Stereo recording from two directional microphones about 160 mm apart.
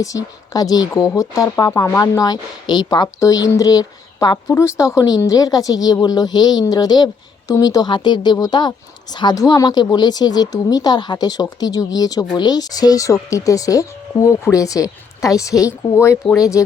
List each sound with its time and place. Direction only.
0.0 s speech: 20° left (ahead or behind)